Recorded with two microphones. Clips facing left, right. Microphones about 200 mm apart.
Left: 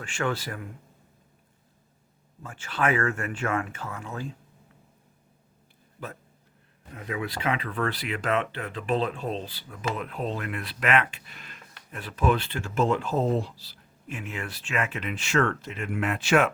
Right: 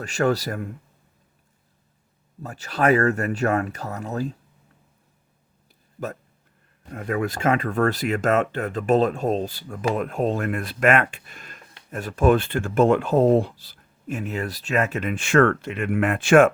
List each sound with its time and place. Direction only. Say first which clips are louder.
0.0 s speech: right 7 dB; 40° right (ahead or behind)
2.4 s speech: right 5 dB; 40° right (ahead or behind)
6.9 s speech: right 7 dB; 50° right (ahead or behind)